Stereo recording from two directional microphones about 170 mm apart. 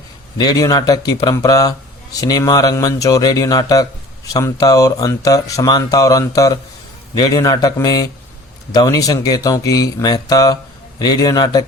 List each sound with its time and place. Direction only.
0.3 s speech: 20° left (ahead or behind)